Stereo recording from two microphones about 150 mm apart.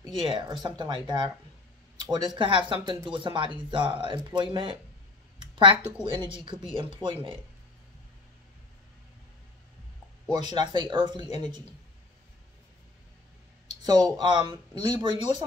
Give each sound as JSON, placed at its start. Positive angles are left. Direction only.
{"t": 0.2, "sound": "speech", "side_deg": -30}
{"t": 5.4, "sound": "a sound", "side_deg": -35}
{"t": 6.0, "sound": "speech", "side_deg": -35}
{"t": 10.3, "sound": "speech", "side_deg": -25}
{"t": 13.8, "sound": "speech", "side_deg": -25}